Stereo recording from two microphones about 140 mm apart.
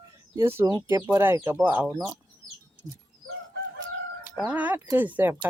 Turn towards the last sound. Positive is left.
turn(degrees=-15)  # may be behind; listen again after turning